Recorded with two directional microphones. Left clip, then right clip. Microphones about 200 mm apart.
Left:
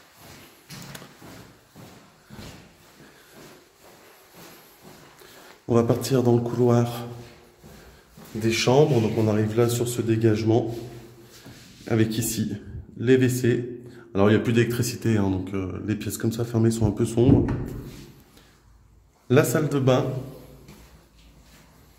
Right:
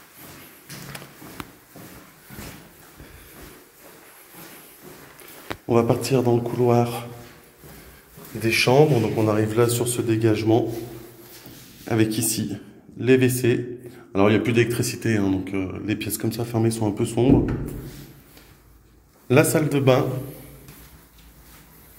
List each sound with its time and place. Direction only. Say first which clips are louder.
5.7 s speech: right 2 dB; 20° left (ahead or behind)
8.4 s a man's voice: right 2 dB; 15° left (ahead or behind)
11.8 s a man's voice: right 2 dB; 20° left (ahead or behind)
19.2 s a man's voice: right 2 dB; 15° left (ahead or behind)